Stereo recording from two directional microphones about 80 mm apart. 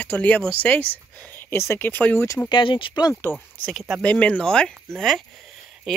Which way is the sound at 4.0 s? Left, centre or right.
Centre.